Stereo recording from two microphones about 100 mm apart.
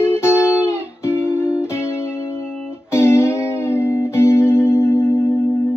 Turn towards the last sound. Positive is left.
turn(degrees=25)  # may be behind; listen again after turning